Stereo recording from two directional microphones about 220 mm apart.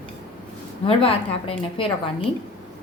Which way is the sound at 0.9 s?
25° left (ahead or behind).